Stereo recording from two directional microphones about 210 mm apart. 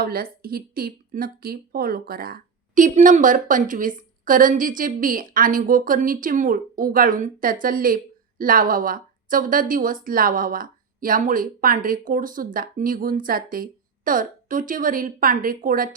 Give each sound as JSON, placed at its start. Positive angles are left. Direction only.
{"t": 0.0, "sound": "speech", "side_deg": -45}